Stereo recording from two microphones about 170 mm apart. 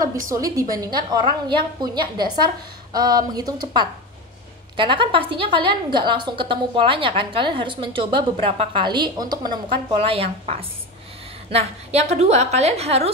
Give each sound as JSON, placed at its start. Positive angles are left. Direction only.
{"t": 0.0, "sound": "a woman's voice", "side_deg": -20}
{"t": 4.7, "sound": "a woman's voice", "side_deg": -30}